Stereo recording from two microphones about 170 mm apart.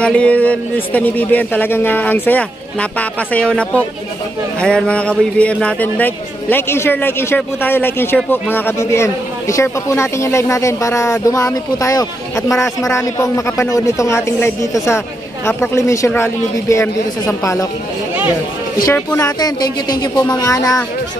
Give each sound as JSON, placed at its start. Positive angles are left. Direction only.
{"t": 0.0, "sound": "speech", "side_deg": 5}
{"t": 18.9, "sound": "speech", "side_deg": 15}